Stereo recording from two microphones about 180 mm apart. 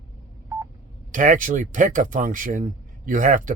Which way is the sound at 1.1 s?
50° right (ahead or behind).